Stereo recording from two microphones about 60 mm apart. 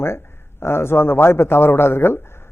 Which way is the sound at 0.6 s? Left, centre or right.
Left.